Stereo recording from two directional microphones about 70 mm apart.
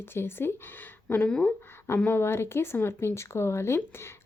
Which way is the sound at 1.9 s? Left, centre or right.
Left.